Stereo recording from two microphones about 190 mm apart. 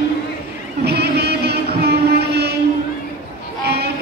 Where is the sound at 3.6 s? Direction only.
60° right (ahead or behind).